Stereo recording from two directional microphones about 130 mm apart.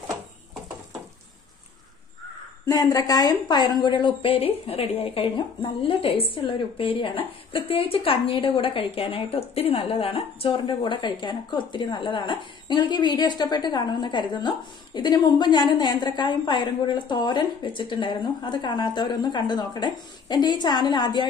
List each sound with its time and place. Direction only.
2.6 s a woman's voice: 30° left (ahead or behind)